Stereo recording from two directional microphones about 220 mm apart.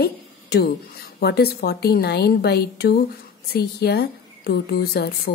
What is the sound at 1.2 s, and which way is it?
A woman's voice, 45° left (ahead or behind).